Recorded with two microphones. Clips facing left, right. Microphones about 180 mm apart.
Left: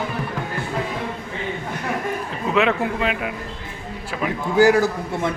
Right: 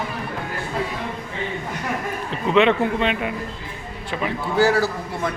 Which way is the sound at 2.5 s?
5° left (ahead or behind).